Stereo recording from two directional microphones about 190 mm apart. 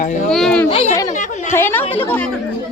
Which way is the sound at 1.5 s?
10° left (ahead or behind).